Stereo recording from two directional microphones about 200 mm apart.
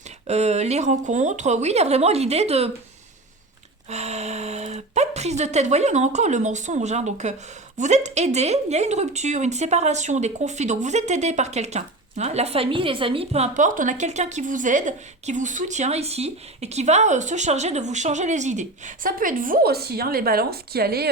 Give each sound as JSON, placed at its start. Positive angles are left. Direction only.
{"t": 0.3, "sound": "speech", "side_deg": -35}
{"t": 3.8, "sound": "speech", "side_deg": -35}